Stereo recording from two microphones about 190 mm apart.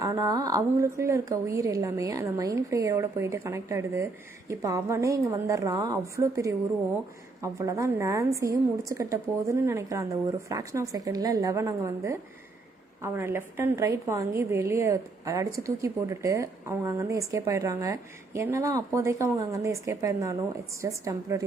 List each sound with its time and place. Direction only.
0.0 s a woman's voice: 20° right (ahead or behind)